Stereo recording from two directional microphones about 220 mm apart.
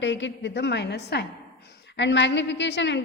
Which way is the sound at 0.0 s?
55° left (ahead or behind).